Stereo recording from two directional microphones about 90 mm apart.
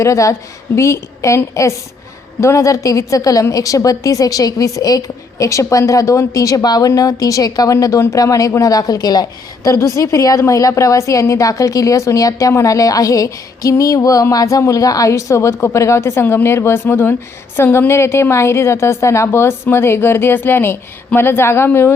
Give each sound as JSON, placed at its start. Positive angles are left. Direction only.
{"t": 0.0, "sound": "a woman's voice", "side_deg": 35}
{"t": 2.4, "sound": "a woman's voice", "side_deg": 35}
{"t": 9.6, "sound": "a woman's voice", "side_deg": 40}